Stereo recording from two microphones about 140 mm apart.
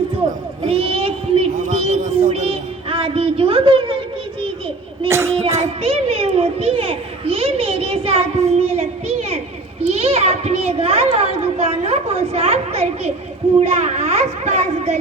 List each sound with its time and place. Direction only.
0.6 s child singing: 45° right (ahead or behind)
1.5 s music: 60° right (ahead or behind)
1.8 s child singing: 45° right (ahead or behind)
5.0 s child singing: 20° right (ahead or behind)
5.8 s children playing: 50° right (ahead or behind)
13.6 s a sound: 55° right (ahead or behind)